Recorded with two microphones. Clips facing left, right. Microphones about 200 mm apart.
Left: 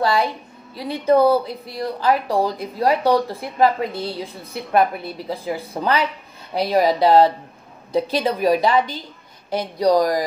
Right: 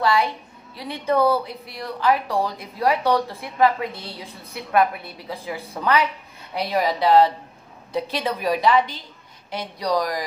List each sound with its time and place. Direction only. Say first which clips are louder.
0.0 s speech: left 1 dB; 35° left (ahead or behind)